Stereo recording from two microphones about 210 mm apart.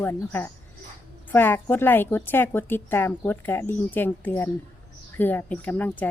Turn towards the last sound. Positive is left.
turn(degrees=5)  # may be behind; listen again after turning